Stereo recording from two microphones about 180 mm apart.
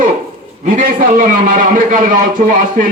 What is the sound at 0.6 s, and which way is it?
A man's voice, 45° right (ahead or behind).